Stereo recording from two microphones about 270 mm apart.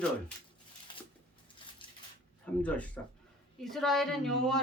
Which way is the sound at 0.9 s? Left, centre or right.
Centre.